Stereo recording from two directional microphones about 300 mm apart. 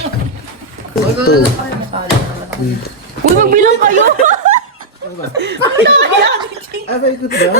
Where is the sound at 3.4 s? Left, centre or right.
Right.